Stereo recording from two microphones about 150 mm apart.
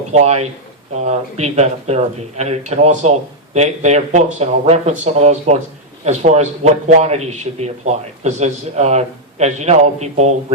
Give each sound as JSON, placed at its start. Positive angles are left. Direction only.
{"t": 0.1, "sound": "speech", "side_deg": -45}